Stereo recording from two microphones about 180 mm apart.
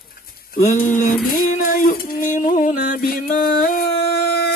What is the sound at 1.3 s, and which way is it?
Music, 50° left (ahead or behind).